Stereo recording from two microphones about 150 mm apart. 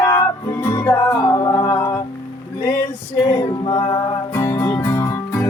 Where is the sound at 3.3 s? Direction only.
30° left (ahead or behind).